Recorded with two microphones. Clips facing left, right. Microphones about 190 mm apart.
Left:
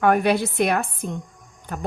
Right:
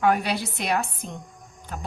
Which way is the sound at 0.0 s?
55° left (ahead or behind).